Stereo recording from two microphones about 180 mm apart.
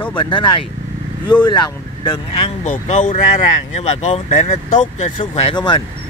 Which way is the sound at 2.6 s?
45° left (ahead or behind).